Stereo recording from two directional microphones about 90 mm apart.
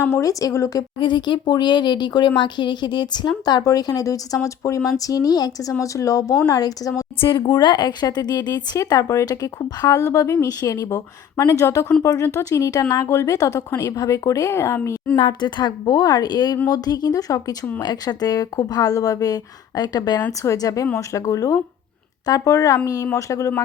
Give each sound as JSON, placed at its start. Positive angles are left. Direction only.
{"t": 0.2, "sound": "speech", "side_deg": 40}
{"t": 0.9, "sound": "speech", "side_deg": 60}
{"t": 7.2, "sound": "speech", "side_deg": 65}
{"t": 8.8, "sound": "a woman's voice", "side_deg": 35}
{"t": 15.2, "sound": "speech", "side_deg": 60}